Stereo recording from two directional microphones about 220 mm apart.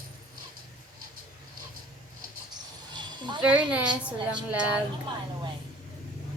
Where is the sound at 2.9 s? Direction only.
20° right (ahead or behind).